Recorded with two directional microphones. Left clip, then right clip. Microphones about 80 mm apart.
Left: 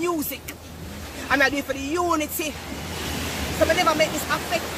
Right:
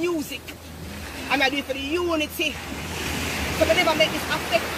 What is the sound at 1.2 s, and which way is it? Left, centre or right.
Speech, left.